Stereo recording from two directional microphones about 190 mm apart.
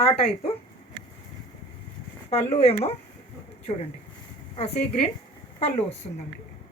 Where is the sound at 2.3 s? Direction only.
30° left (ahead or behind).